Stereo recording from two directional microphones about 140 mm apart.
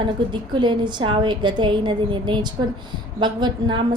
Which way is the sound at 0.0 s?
35° right (ahead or behind).